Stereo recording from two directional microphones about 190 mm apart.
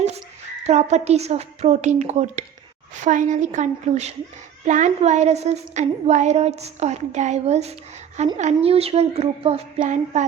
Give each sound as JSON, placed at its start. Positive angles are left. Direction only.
{"t": 0.6, "sound": "a woman's voice", "side_deg": -35}